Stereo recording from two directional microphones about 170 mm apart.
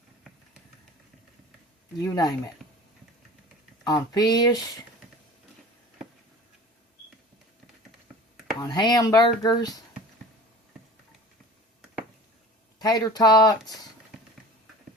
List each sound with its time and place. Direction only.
2.0 s speech: 20° left (ahead or behind)
3.8 s speech: 25° left (ahead or behind)
8.6 s speech: 25° left (ahead or behind)
12.8 s speech: 20° left (ahead or behind)